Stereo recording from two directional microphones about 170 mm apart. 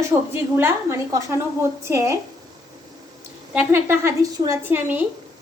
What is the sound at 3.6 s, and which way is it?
A woman's voice, 15° right (ahead or behind).